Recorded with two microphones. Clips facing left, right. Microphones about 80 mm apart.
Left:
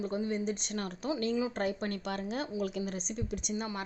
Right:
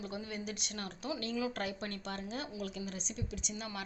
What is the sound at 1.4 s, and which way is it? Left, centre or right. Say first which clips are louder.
Speech: left 4 dB; left.